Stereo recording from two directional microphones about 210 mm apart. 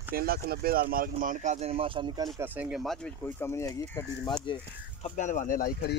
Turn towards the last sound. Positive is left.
turn(degrees=45)  # may be behind; listen again after turning